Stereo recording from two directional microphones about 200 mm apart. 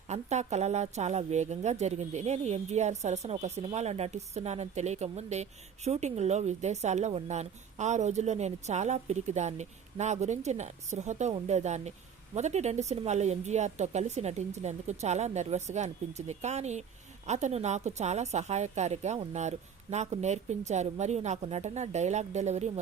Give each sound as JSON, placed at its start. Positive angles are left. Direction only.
{"t": 0.1, "sound": "a woman's voice", "side_deg": -35}